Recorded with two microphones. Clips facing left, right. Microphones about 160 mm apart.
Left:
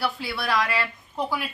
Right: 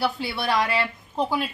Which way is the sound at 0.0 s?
25° right (ahead or behind).